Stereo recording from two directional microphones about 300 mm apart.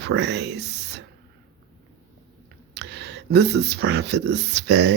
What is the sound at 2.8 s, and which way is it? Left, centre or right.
Speech, right.